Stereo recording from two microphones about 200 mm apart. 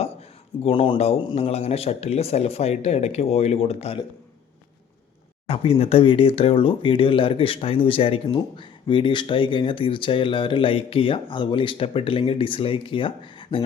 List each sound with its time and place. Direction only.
0.0 s a man's voice: 30° left (ahead or behind)
5.5 s speech: 30° left (ahead or behind)